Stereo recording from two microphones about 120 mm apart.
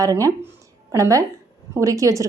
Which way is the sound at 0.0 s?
30° right (ahead or behind).